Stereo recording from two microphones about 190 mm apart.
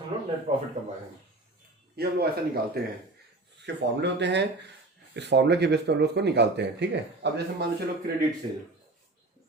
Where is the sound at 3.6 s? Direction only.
65° right (ahead or behind).